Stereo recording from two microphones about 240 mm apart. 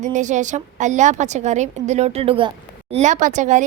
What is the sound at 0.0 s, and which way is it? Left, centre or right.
A woman's voice, right.